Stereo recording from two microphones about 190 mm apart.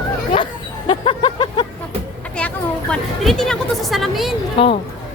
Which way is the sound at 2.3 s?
5° left (ahead or behind).